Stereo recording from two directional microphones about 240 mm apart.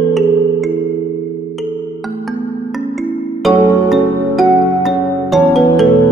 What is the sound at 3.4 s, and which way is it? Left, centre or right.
Music, centre.